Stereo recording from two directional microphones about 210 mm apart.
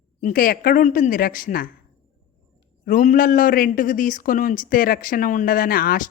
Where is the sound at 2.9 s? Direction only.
40° left (ahead or behind).